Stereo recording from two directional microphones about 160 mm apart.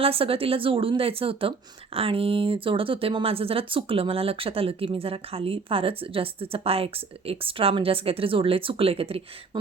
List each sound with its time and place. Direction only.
0.0 s a woman's voice: 35° right (ahead or behind)